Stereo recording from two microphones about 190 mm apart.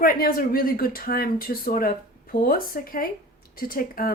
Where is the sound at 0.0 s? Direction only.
50° left (ahead or behind).